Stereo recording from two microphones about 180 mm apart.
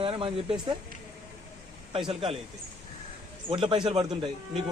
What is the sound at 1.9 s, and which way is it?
Speech, 30° right (ahead or behind).